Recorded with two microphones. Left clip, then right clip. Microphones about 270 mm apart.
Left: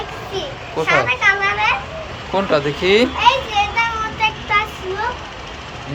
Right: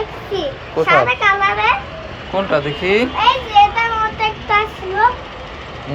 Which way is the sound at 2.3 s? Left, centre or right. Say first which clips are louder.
Even; left.